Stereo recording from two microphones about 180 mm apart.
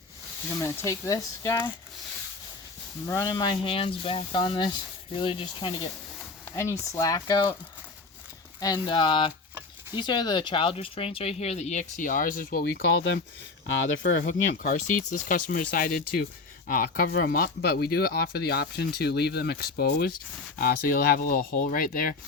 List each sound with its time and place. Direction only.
0.6 s speech: 15° left (ahead or behind)
3.1 s speech: 20° left (ahead or behind)
6.6 s speech: 15° left (ahead or behind)
8.6 s speech: 25° left (ahead or behind); by 12.8 s 50° left (ahead or behind)
12.9 s speech: 90° left
14.3 s speech: 45° left (ahead or behind)